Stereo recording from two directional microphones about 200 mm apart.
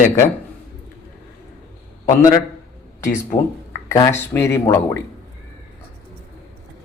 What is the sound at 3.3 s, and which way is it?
Speech, 40° left (ahead or behind).